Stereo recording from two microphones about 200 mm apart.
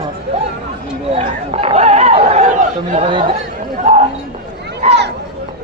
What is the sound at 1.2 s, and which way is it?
Chatter, 30° right (ahead or behind).